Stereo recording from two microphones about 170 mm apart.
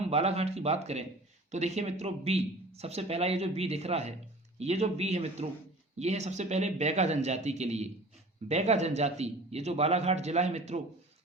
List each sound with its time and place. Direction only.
0.0 s speech: 40° right (ahead or behind)